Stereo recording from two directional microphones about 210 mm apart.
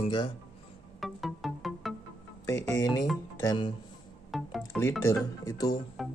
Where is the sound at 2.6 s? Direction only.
15° left (ahead or behind).